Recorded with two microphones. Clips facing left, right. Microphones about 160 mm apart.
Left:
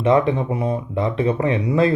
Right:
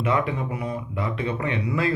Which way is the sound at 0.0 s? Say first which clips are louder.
Left 7 dB; 30° left (ahead or behind).